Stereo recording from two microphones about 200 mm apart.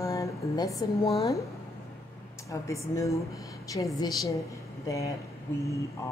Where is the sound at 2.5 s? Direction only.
15° left (ahead or behind).